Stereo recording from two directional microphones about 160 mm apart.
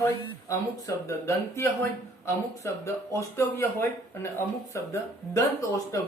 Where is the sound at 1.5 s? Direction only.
15° left (ahead or behind).